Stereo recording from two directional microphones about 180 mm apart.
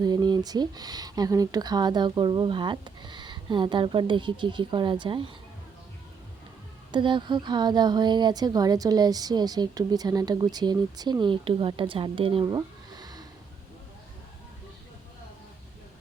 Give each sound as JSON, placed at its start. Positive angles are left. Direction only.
{"t": 0.0, "sound": "speech", "side_deg": -25}
{"t": 6.9, "sound": "speech", "side_deg": -25}